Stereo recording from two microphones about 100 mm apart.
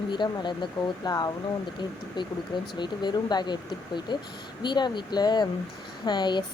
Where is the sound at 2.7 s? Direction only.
50° left (ahead or behind).